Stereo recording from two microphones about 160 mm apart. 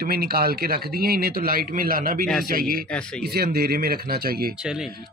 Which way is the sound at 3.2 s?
75° right (ahead or behind).